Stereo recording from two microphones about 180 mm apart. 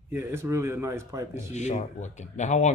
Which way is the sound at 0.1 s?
15° right (ahead or behind).